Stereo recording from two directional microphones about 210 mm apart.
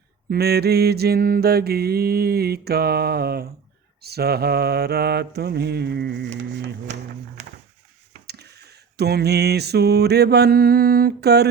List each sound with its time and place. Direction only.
0.3 s mantra: 50° right (ahead or behind)
8.3 s mantra: 50° right (ahead or behind)